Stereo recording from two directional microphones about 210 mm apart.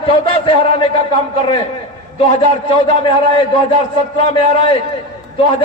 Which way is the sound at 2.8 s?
20° left (ahead or behind).